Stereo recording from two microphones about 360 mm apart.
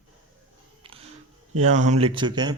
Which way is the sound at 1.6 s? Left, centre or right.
Centre.